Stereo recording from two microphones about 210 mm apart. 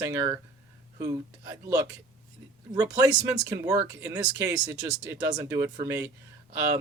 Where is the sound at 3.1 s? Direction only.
10° right (ahead or behind).